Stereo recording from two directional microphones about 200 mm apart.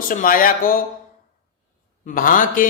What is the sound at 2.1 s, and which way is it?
Speech, 45° left (ahead or behind).